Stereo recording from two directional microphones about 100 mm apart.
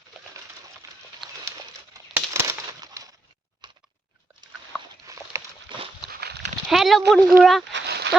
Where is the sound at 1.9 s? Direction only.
30° right (ahead or behind).